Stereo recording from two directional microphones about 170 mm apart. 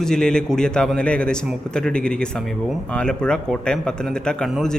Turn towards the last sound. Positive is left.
turn(degrees=5)  # may be behind; listen again after turning